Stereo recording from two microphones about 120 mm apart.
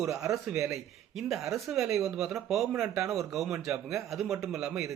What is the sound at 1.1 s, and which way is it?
Speech, centre (ahead or behind).